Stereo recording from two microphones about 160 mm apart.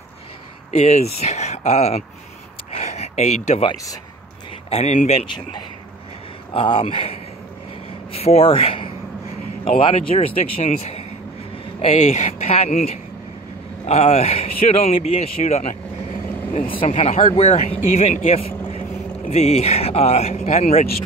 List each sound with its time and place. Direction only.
0.7 s a man's voice: 40° left (ahead or behind)
6.5 s a man's voice: 35° left (ahead or behind)
11.5 s a sound: 35° left (ahead or behind)
11.9 s a man's voice: 45° left (ahead or behind)